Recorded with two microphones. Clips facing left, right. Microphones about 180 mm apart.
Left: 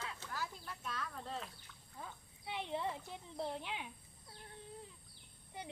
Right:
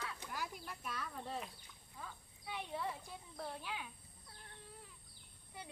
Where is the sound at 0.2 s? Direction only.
15° right (ahead or behind).